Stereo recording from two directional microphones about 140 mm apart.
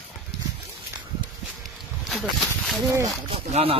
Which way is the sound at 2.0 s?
Centre (ahead or behind).